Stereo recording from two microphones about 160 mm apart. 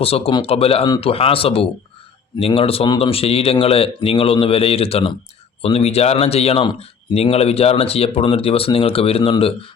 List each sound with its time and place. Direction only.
0.0 s speech: 35° left (ahead or behind)